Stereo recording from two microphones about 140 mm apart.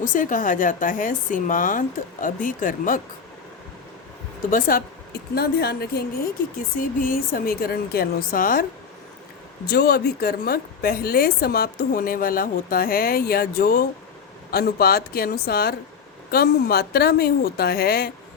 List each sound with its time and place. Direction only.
0.0 s a woman's voice: 70° left (ahead or behind)
4.5 s a woman's voice: 75° left (ahead or behind)
5.4 s a woman's voice: 90° left
9.8 s a woman's voice: 90° left